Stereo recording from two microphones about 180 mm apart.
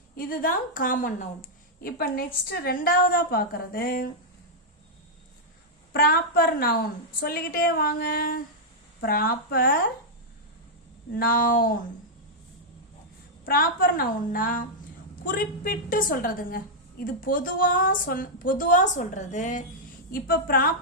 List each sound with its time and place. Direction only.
0.2 s a woman's voice: 50° left (ahead or behind)
5.9 s a woman's voice: 55° left (ahead or behind)
11.1 s a woman's voice: 50° left (ahead or behind)
13.4 s a woman's voice: 55° left (ahead or behind)